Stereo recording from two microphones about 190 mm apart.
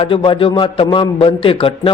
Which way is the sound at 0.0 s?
25° left (ahead or behind).